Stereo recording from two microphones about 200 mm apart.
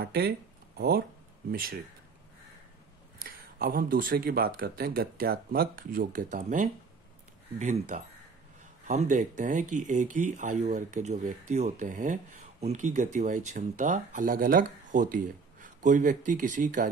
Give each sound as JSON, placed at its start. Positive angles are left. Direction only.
{"t": 0.0, "sound": "speech", "side_deg": -55}
{"t": 3.3, "sound": "speech", "side_deg": -50}